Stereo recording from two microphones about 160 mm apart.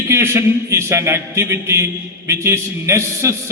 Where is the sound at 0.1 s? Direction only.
15° right (ahead or behind).